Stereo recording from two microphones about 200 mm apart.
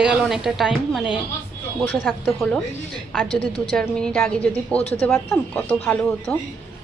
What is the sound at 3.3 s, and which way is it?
Speech, 30° left (ahead or behind).